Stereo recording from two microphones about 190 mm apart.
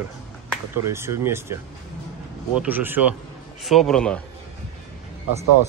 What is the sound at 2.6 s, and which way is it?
Speech, 10° right (ahead or behind).